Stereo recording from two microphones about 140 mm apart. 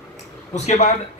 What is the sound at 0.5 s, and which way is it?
Speech, 55° left (ahead or behind).